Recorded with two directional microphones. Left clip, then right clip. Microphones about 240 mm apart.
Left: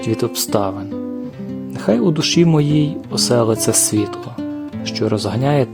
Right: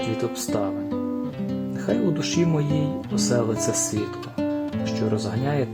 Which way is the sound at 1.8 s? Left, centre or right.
Left.